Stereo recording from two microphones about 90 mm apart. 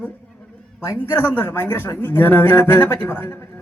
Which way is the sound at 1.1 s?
20° left (ahead or behind).